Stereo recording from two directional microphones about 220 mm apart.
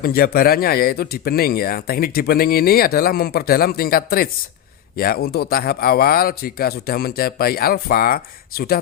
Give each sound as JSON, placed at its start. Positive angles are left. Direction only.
{"t": 0.0, "sound": "speech", "side_deg": 45}